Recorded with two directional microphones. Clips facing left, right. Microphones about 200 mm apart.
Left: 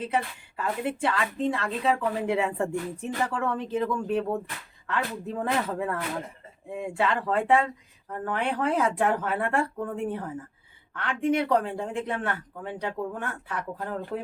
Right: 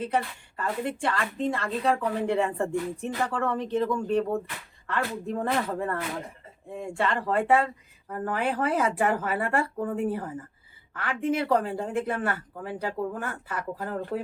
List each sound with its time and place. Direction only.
0.0 s a woman's voice: 5° left (ahead or behind)